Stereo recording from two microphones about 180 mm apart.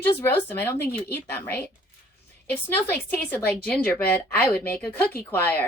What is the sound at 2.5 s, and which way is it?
A woman's voice, 10° left (ahead or behind).